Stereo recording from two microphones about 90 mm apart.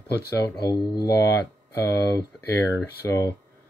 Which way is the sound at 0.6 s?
45° left (ahead or behind).